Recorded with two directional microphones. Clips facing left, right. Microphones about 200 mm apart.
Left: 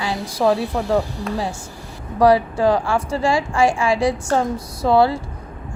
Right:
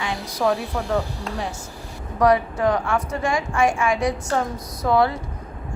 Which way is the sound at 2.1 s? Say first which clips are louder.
Left 3 dB; 30° left (ahead or behind).